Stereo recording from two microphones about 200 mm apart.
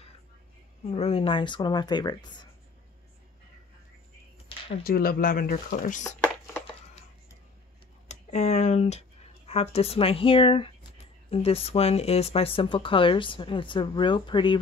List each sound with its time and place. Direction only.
0.8 s speech: 30° left (ahead or behind)
4.5 s a sound: 25° left (ahead or behind)
4.8 s speech: 45° left (ahead or behind)
8.1 s speech: 35° left (ahead or behind)